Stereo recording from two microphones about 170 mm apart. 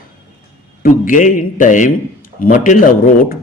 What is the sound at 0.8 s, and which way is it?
Speech, 50° left (ahead or behind).